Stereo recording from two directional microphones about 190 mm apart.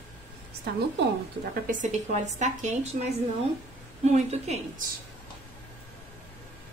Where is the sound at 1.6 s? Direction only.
40° right (ahead or behind).